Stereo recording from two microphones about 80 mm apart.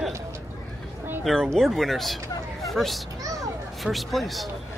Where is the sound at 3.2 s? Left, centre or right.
Right.